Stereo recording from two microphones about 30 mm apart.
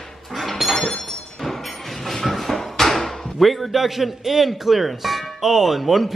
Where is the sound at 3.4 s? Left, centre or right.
Centre.